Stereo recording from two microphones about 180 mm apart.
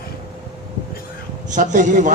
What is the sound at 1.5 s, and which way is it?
Speech, 45° right (ahead or behind).